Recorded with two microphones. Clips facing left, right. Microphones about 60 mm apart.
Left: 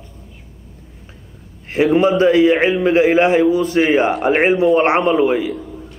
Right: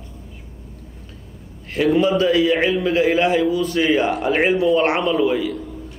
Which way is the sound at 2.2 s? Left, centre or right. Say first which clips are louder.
Left 5 dB; left.